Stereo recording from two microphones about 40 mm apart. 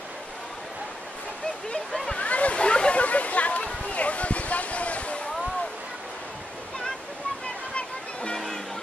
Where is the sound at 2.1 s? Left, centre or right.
Left.